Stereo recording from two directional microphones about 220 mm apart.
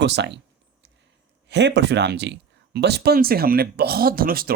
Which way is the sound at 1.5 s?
50° right (ahead or behind).